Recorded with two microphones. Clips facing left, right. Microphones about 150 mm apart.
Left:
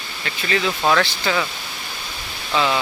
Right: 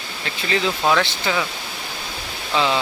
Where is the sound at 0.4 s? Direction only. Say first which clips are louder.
Even; 25° right (ahead or behind).